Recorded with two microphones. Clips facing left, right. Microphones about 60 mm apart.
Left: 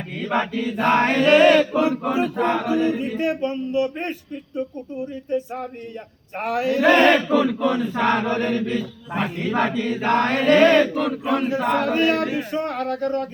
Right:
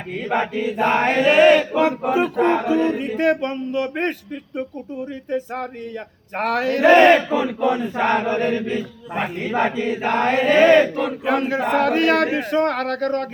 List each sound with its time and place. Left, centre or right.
0.2 s chant: centre
3.2 s speech: right
6.3 s speech: right
6.8 s chant: centre
11.3 s speech: right